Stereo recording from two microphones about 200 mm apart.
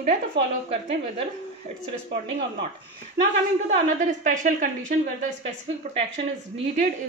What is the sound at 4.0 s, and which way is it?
Speech, 40° right (ahead or behind).